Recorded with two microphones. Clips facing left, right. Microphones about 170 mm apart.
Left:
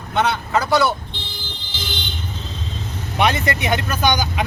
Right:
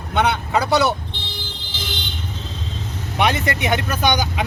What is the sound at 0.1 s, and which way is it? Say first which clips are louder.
Speech: even; 20° right (ahead or behind).